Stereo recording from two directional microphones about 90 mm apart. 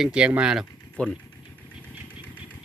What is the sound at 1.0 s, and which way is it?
Speech, 15° left (ahead or behind).